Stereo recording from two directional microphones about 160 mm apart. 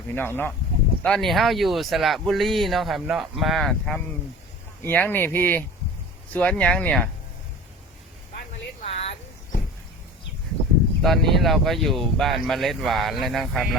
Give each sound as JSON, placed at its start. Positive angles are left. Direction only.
{"t": 0.1, "sound": "speech", "side_deg": 15}
{"t": 8.8, "sound": "a sound", "side_deg": 40}
{"t": 11.0, "sound": "speech", "side_deg": 0}